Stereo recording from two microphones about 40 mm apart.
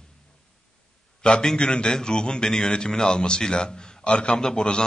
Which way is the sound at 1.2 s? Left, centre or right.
Centre.